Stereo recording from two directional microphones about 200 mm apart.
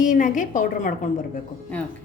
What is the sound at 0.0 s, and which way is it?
Speech, 40° left (ahead or behind).